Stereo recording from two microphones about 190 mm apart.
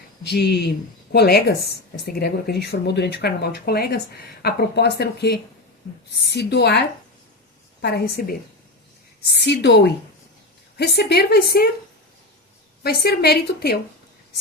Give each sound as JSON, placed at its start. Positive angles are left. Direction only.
{"t": 0.3, "sound": "speech", "side_deg": 60}
{"t": 12.8, "sound": "speech", "side_deg": 55}